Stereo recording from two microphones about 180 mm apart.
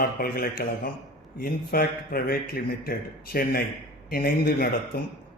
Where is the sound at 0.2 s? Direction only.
55° left (ahead or behind).